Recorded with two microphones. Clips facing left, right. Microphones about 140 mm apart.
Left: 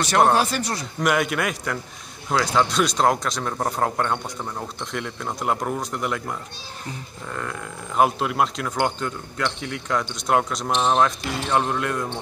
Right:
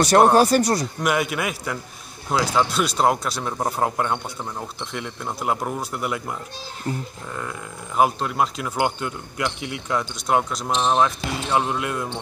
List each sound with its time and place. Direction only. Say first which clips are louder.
0.3 s speech: right 5 dB; 40° right (ahead or behind)
1.0 s speech: left 3 dB; centre (ahead or behind)
7.3 s speech: left 1 dB; 5° right (ahead or behind)